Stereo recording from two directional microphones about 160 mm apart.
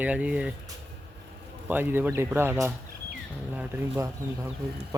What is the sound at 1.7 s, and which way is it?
Speech, 10° right (ahead or behind).